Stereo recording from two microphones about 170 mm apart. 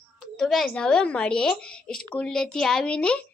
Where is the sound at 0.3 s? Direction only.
5° left (ahead or behind).